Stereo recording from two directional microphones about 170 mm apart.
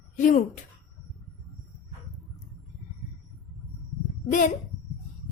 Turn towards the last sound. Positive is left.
turn(degrees=50)  # may be behind; listen again after turning